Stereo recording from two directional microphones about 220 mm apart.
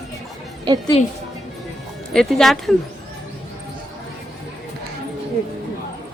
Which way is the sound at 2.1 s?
Centre (ahead or behind).